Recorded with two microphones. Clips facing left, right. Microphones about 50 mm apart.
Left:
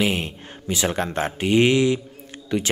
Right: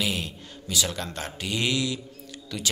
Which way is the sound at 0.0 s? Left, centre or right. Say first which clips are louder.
Left 6 dB; left.